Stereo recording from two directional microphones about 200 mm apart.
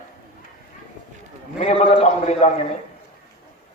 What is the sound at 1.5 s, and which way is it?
Speech, 30° left (ahead or behind).